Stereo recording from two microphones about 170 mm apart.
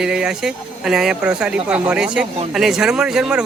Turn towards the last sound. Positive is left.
turn(degrees=-5)  # may be behind; listen again after turning